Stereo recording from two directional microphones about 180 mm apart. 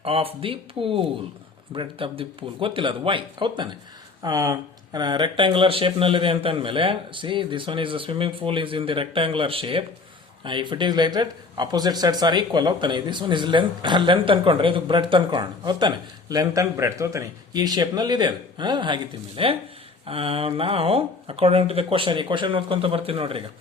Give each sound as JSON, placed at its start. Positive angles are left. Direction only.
{"t": 0.0, "sound": "speech", "side_deg": -30}